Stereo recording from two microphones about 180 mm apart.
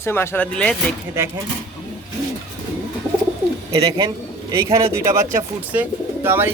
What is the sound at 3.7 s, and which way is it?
Speech, 30° right (ahead or behind).